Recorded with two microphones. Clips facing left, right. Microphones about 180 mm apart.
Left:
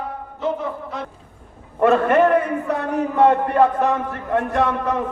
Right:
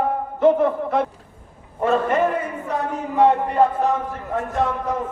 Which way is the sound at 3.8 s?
70° left (ahead or behind).